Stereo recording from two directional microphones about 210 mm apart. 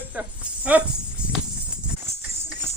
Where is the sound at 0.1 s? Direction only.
5° right (ahead or behind).